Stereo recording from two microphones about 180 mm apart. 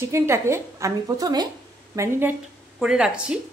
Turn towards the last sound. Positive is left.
turn(degrees=-5)  # may be behind; listen again after turning